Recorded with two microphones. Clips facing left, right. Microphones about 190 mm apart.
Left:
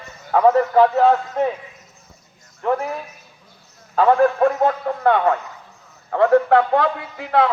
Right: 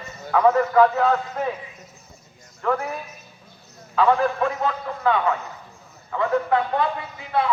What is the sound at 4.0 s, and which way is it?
A man's voice, 45° left (ahead or behind).